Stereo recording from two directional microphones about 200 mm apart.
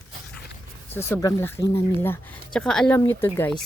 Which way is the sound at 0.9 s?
10° left (ahead or behind).